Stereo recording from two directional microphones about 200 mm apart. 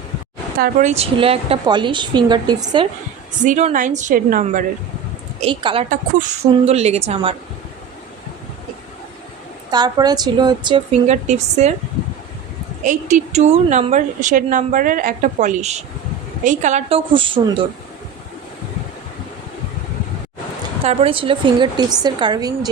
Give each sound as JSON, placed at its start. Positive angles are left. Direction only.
{"t": 0.6, "sound": "a woman's voice", "side_deg": -35}
{"t": 3.4, "sound": "a woman's voice", "side_deg": -40}
{"t": 5.4, "sound": "a woman's voice", "side_deg": -25}
{"t": 5.9, "sound": "a woman's voice", "side_deg": -40}
{"t": 9.7, "sound": "a woman's voice", "side_deg": -20}
{"t": 11.0, "sound": "a woman's voice", "side_deg": -35}
{"t": 12.8, "sound": "a woman's voice", "side_deg": -40}
{"t": 20.8, "sound": "a woman's voice", "side_deg": -30}